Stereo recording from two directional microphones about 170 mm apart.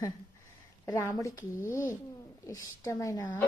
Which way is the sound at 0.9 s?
15° left (ahead or behind).